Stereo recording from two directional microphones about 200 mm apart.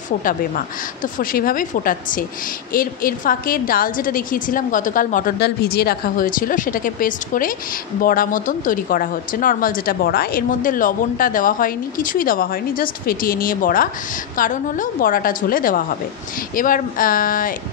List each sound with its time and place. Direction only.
1.0 s a woman's voice: 45° left (ahead or behind)